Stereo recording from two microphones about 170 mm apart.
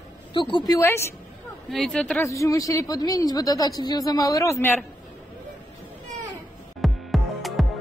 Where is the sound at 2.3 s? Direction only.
20° left (ahead or behind).